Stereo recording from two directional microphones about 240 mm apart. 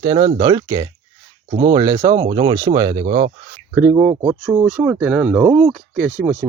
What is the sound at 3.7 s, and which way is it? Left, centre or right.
Speech, centre.